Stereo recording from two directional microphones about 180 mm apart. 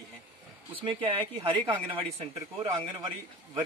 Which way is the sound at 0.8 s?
30° right (ahead or behind).